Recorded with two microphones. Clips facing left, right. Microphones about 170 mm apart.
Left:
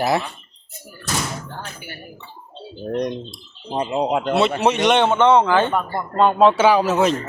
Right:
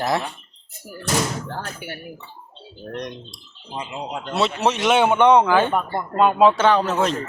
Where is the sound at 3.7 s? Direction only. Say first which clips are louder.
Left 8 dB; 40° left (ahead or behind).